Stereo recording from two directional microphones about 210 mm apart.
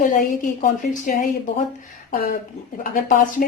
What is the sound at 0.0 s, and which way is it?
A woman's voice, 40° left (ahead or behind).